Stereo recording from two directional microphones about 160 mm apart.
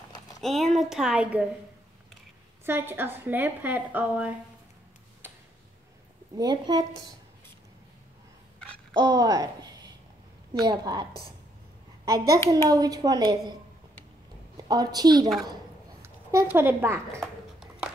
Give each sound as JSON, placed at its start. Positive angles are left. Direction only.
{"t": 0.4, "sound": "a woman's voice", "side_deg": 0}
{"t": 2.6, "sound": "a woman's voice", "side_deg": -15}
{"t": 5.2, "sound": "tick-tock", "side_deg": -10}
{"t": 6.3, "sound": "a child's voice", "side_deg": -25}
{"t": 8.9, "sound": "a woman's voice", "side_deg": -25}
{"t": 14.7, "sound": "a child's voice", "side_deg": -25}